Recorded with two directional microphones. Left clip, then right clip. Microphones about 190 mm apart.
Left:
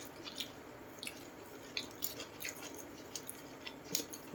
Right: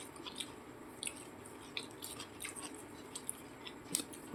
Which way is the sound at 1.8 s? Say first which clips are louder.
Left 2 dB; 15° left (ahead or behind).